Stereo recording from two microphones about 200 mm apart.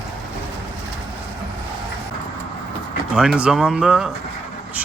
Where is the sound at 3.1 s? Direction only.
5° right (ahead or behind).